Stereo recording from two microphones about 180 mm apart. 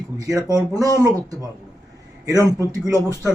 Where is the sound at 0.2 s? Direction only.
20° right (ahead or behind).